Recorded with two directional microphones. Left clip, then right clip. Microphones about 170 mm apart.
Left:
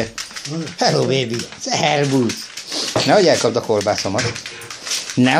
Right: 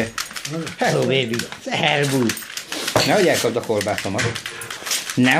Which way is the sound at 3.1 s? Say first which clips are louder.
Left 6 dB; 30° left (ahead or behind).